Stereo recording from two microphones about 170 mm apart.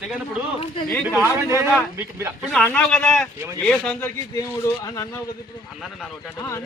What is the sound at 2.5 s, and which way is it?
Speech, 5° left (ahead or behind).